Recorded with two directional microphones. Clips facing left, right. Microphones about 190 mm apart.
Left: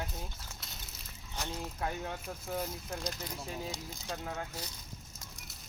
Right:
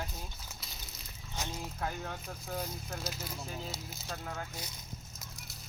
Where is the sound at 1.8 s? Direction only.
5° left (ahead or behind).